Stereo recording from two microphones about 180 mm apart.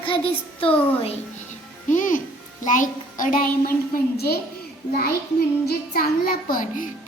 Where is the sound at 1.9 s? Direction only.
45° left (ahead or behind).